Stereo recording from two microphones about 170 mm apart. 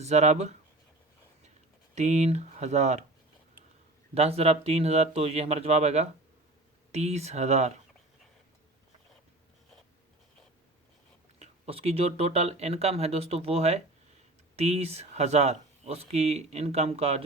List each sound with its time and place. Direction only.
0.0 s speech: 40° right (ahead or behind)
2.0 s speech: 40° right (ahead or behind)
4.1 s speech: 35° right (ahead or behind)
11.3 s speech: 35° right (ahead or behind)